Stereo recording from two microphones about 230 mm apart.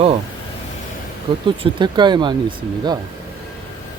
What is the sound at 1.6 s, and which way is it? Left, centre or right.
Speech, right.